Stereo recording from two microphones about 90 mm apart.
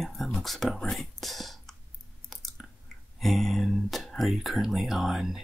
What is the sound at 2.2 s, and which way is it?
Chewing, centre (ahead or behind).